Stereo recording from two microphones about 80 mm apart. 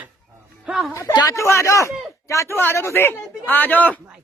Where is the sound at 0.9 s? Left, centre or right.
Left.